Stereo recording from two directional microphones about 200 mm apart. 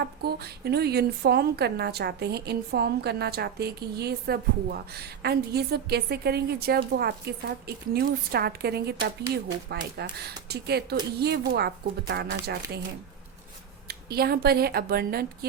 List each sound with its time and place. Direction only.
0.0 s a woman's voice: 50° right (ahead or behind)
13.8 s a woman's voice: 50° right (ahead or behind)